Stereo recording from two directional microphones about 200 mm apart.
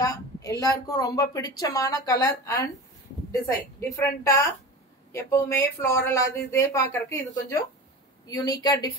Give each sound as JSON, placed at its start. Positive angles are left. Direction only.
{"t": 0.0, "sound": "a woman's voice", "side_deg": 15}
{"t": 3.9, "sound": "a woman's voice", "side_deg": 15}